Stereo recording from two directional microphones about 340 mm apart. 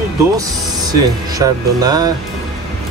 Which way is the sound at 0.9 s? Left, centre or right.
Centre.